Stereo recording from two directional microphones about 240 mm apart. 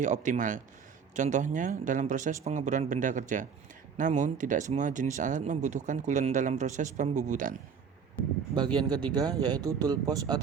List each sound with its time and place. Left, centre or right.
0.0 s speech: right
8.5 s speech: centre